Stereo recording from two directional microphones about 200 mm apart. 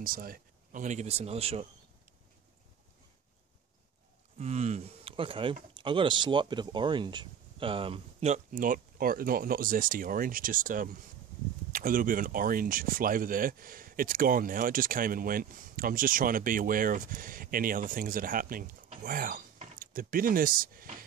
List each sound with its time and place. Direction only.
0.0 s speech: 45° right (ahead or behind)
4.4 s speech: 35° right (ahead or behind)